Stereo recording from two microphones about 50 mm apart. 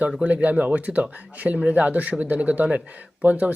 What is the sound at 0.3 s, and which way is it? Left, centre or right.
Speech, right.